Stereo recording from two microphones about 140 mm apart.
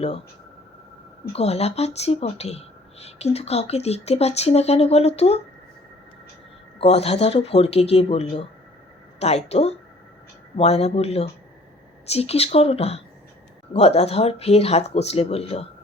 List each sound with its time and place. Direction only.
1.3 s speech: 50° left (ahead or behind)
6.7 s speech: 45° left (ahead or behind)